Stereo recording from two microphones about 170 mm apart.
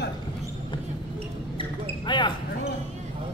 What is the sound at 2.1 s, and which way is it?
Speech, 25° left (ahead or behind).